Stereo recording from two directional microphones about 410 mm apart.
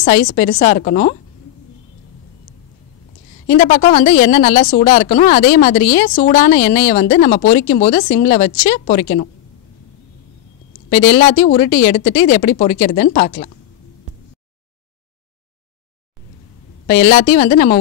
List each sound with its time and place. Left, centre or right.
0.0 s a woman's voice: left
3.4 s a woman's voice: left
10.9 s a woman's voice: left
16.8 s a woman's voice: left